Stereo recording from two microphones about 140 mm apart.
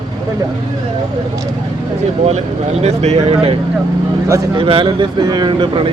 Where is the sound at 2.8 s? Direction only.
50° right (ahead or behind).